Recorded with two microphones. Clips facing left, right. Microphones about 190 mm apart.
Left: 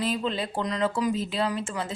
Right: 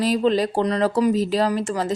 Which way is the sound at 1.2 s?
40° right (ahead or behind).